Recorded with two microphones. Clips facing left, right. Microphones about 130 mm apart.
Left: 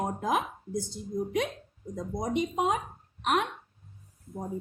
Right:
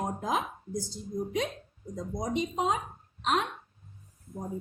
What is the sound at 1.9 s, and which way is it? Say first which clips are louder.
A woman's voice: left 1 dB; 55° left (ahead or behind).